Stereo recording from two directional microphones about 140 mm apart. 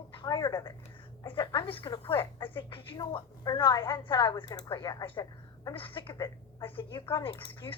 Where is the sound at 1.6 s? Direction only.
40° left (ahead or behind).